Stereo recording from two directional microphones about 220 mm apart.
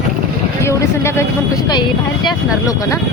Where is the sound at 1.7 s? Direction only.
20° left (ahead or behind).